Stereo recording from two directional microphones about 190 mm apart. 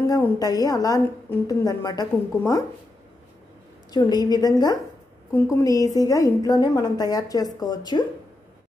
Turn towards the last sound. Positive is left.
turn(degrees=20)  # may be behind; listen again after turning